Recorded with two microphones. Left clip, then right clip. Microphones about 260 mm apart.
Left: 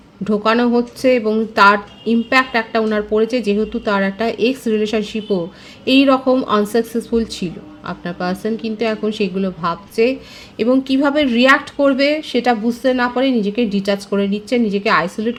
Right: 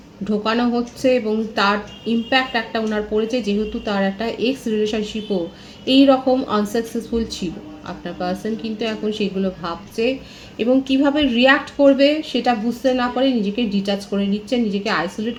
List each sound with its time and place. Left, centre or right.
0.3 s speech: left